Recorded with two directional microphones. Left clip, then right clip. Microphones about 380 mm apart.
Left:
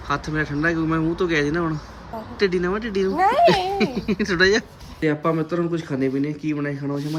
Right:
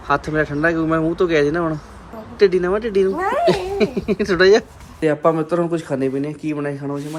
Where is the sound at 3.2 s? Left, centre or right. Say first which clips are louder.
Left 2 dB; left.